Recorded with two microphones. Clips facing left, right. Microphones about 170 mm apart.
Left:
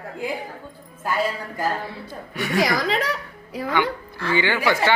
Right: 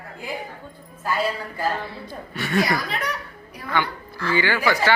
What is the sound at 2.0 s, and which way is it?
Speech, 15° left (ahead or behind).